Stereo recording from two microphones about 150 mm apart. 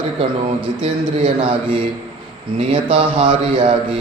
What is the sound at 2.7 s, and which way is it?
A man's voice, 35° right (ahead or behind).